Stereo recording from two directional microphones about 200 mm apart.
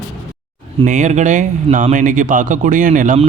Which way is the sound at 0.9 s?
35° right (ahead or behind).